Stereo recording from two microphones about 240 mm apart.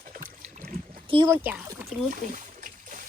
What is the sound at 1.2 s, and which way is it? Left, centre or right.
Speech, centre.